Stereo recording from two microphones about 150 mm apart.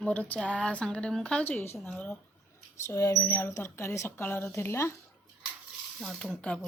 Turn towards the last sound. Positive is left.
turn(degrees=5)  # may be behind; listen again after turning